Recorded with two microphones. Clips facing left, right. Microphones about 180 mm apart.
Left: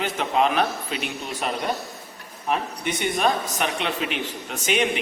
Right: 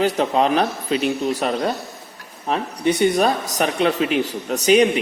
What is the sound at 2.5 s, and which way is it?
A man's voice, 35° right (ahead or behind).